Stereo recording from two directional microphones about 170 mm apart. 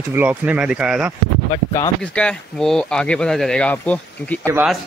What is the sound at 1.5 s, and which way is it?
Speech, 20° left (ahead or behind).